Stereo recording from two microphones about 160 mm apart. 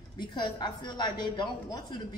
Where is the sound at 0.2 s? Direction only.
25° left (ahead or behind).